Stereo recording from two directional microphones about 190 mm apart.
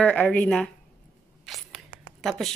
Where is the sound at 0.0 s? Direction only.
5° left (ahead or behind).